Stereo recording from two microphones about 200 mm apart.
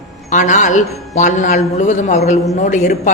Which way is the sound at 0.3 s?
40° left (ahead or behind).